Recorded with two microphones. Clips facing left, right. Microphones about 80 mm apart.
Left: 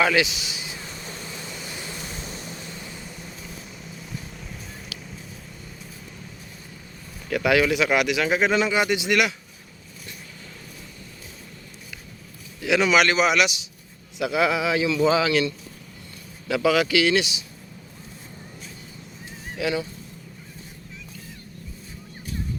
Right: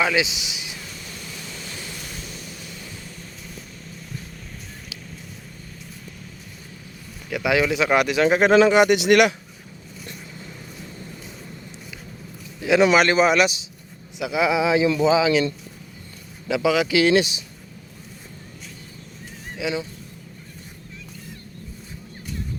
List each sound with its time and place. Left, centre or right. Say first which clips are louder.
0.2 s speech: left 1 dB; centre
0.8 s vehicle: left 1 dB; left
2.2 s vehicle: left 2 dB; left
7.3 s speech: left 1 dB; centre
7.7 s speech: right 2 dB; right
8.4 s a man's voice: right 10 dB; right
12.8 s speech: right 3 dB; right
14.2 s speech: right 1 dB; centre
14.6 s speech: right 3 dB; right
16.5 s speech: even; centre
17.0 s speech: right 4 dB; right
19.5 s speech: left 1 dB; centre